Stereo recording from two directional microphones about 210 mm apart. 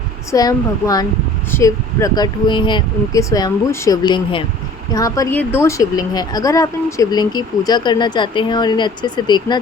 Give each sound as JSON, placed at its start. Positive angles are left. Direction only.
{"t": 0.3, "sound": "speech", "side_deg": 15}